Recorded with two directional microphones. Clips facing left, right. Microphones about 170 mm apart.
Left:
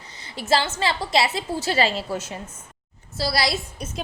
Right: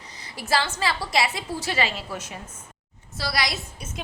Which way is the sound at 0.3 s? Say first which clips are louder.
Left 3 dB; 25° left (ahead or behind).